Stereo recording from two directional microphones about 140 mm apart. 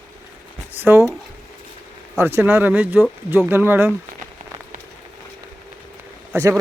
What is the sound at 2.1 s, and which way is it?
Speech, 15° right (ahead or behind).